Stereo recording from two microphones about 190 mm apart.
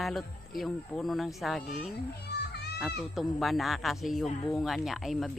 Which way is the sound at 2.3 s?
60° left (ahead or behind).